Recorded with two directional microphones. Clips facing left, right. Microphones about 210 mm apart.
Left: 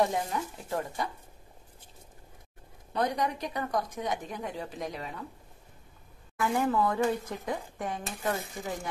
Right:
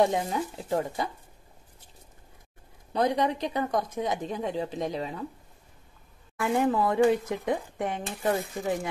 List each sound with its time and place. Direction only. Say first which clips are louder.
0.0 s a woman's voice: right 4 dB; 20° right (ahead or behind)
2.9 s a woman's voice: right 4 dB; 20° right (ahead or behind)
6.4 s a woman's voice: right 2 dB; 20° right (ahead or behind)